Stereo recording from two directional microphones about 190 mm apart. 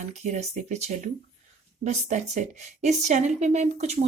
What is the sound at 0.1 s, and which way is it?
A woman's voice, 35° right (ahead or behind).